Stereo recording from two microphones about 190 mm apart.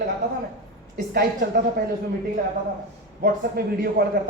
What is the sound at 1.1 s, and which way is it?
Speech, 55° right (ahead or behind).